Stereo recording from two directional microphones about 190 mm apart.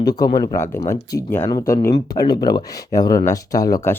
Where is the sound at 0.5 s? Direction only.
15° left (ahead or behind).